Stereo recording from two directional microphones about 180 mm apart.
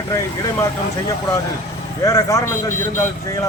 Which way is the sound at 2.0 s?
20° left (ahead or behind).